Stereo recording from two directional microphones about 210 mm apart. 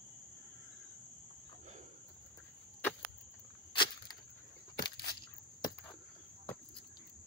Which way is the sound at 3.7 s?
25° left (ahead or behind).